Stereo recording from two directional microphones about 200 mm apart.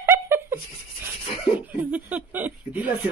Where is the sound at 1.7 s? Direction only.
5° right (ahead or behind).